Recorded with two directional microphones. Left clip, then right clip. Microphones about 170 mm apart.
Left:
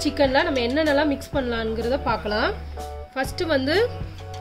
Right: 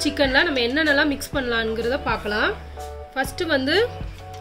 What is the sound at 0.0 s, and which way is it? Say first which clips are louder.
A woman's voice: right 1 dB; 5° right (ahead or behind).